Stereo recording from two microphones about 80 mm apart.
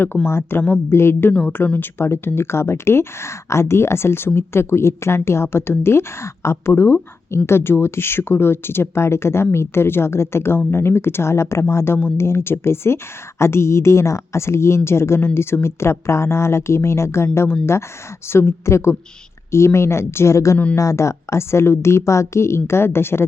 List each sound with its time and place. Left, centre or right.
0.3 s speech: left
1.3 s speech: centre
1.5 s speech: left